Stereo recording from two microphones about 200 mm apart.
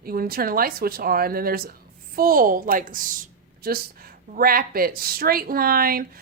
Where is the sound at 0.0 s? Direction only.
50° right (ahead or behind).